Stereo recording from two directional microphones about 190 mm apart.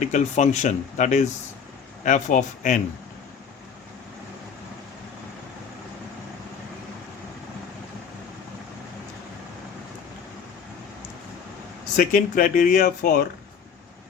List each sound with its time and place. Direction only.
0.0 s speech: 40° left (ahead or behind)
11.9 s speech: 45° left (ahead or behind)